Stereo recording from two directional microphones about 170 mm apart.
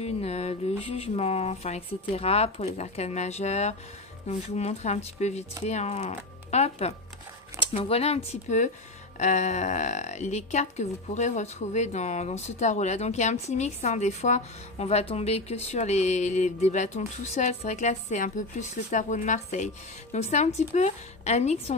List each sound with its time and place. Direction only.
0.0 s a woman's voice: 40° left (ahead or behind)